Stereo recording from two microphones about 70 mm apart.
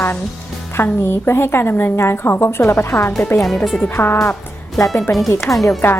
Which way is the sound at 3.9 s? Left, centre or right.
Left.